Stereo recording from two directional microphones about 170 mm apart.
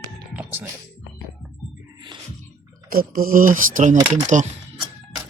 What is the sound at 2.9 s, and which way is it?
Speech, 55° right (ahead or behind).